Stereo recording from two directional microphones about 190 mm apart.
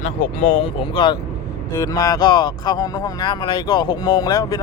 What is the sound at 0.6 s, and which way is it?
Speech, 25° left (ahead or behind).